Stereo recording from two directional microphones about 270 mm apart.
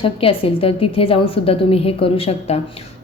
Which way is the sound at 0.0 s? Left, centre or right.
Centre.